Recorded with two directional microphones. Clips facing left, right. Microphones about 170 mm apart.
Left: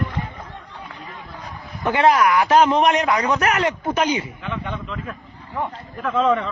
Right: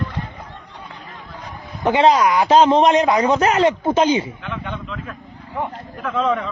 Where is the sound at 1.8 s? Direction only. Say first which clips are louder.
Right 2 dB; 20° right (ahead or behind).